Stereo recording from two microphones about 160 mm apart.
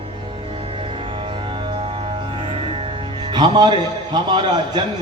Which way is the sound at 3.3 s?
30° right (ahead or behind).